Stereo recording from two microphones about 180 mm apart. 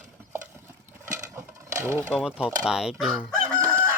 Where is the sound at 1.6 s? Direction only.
15° right (ahead or behind).